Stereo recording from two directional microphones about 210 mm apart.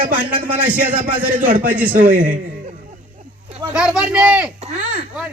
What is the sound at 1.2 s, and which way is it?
A man's voice, 40° right (ahead or behind).